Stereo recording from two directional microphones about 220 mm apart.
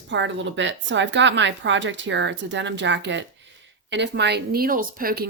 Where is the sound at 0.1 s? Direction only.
55° right (ahead or behind).